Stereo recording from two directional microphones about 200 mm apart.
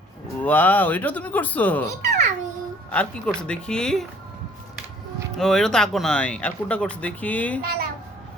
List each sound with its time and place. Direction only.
0.4 s speech: 10° left (ahead or behind)
2.0 s babbling: 35° right (ahead or behind)
2.9 s speech: 5° left (ahead or behind)
5.4 s speech: centre (ahead or behind)
7.6 s a child's voice: 50° right (ahead or behind)